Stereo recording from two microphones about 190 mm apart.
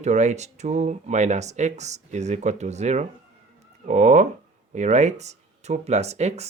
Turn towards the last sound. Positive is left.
turn(degrees=-35)  # may be behind; listen again after turning